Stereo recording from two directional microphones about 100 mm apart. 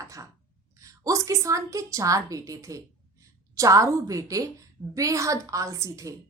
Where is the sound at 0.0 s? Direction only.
35° right (ahead or behind).